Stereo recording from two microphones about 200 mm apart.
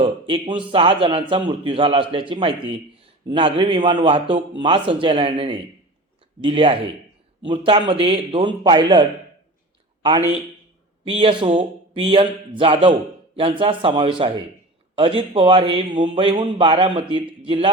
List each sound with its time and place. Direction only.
0.0 s a man's voice: 25° right (ahead or behind)
11.0 s a man's voice: 25° right (ahead or behind)